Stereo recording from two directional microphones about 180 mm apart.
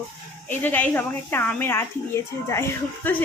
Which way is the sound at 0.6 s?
10° left (ahead or behind).